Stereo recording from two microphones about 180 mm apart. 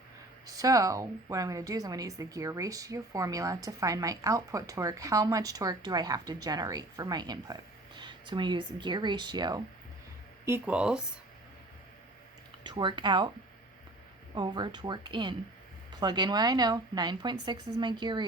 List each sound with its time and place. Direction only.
0.4 s a woman's voice: 20° right (ahead or behind)
10.4 s speech: 10° right (ahead or behind)
12.6 s a woman's voice: 25° right (ahead or behind)
14.3 s a woman's voice: 25° right (ahead or behind)